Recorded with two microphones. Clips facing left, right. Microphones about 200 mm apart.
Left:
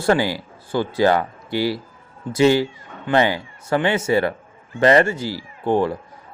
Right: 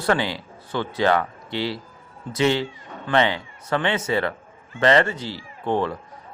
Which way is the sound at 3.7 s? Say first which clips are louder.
Left 4 dB; 30° left (ahead or behind).